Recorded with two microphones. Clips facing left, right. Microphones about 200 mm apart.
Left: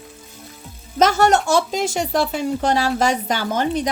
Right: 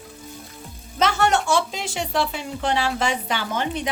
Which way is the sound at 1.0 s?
40° left (ahead or behind).